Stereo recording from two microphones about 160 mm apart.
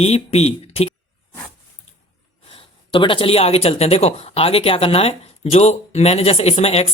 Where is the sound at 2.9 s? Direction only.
35° left (ahead or behind).